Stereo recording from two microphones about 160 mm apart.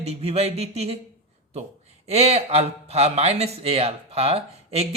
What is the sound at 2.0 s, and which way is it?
Speech, 40° right (ahead or behind).